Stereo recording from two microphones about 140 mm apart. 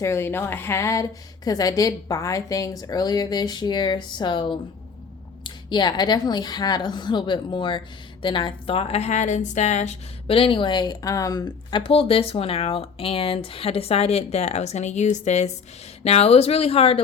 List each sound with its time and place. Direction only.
0.0 s a woman's voice: 20° left (ahead or behind)
11.8 s speech: 40° left (ahead or behind)